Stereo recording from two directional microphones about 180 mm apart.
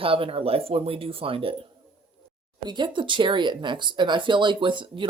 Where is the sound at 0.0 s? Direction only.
30° right (ahead or behind).